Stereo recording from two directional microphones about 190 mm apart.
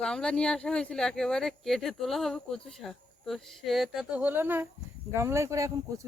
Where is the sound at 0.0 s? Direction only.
5° left (ahead or behind).